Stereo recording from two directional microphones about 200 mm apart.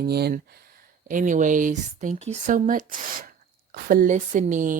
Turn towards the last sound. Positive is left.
turn(degrees=-40)  # may be behind; listen again after turning